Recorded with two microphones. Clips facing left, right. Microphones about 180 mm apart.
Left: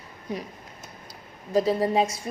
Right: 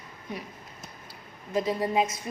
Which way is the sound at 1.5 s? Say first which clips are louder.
Left 4 dB; 35° left (ahead or behind).